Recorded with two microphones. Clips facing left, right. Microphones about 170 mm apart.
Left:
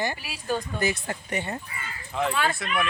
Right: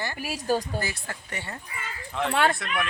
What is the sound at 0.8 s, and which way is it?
Speech, 20° left (ahead or behind).